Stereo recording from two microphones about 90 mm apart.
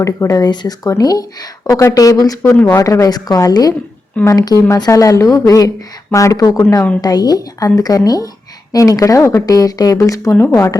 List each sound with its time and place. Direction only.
0.0 s a woman's voice: 40° left (ahead or behind)
2.5 s speech: 15° left (ahead or behind)
2.7 s a woman's voice: 35° left (ahead or behind)